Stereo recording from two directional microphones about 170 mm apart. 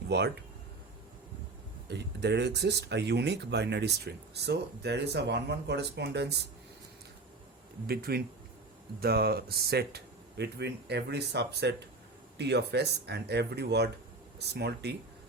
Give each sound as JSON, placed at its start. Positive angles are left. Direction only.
{"t": 1.9, "sound": "speech", "side_deg": -80}
{"t": 7.9, "sound": "speech", "side_deg": -65}